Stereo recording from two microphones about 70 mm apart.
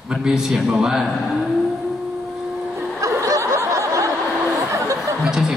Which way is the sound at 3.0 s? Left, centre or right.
Right.